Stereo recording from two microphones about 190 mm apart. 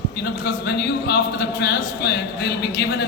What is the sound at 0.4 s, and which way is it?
A man's voice, 60° left (ahead or behind).